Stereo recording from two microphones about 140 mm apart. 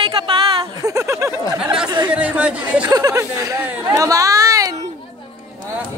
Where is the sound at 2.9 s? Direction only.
25° right (ahead or behind).